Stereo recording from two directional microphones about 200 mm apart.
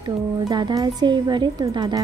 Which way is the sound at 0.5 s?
20° right (ahead or behind).